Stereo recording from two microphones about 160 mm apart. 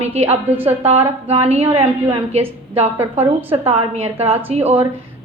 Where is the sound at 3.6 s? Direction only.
35° right (ahead or behind).